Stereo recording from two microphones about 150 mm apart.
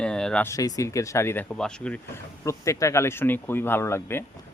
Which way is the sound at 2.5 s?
20° left (ahead or behind).